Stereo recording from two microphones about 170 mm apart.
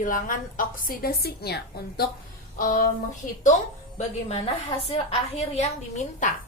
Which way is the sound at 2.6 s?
55° left (ahead or behind).